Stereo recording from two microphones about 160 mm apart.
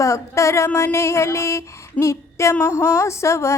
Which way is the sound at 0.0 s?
20° left (ahead or behind).